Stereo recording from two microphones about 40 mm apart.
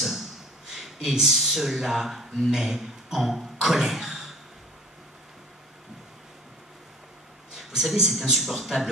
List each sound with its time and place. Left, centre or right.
0.7 s speech: centre
3.6 s a sound: centre
7.5 s a man's voice: centre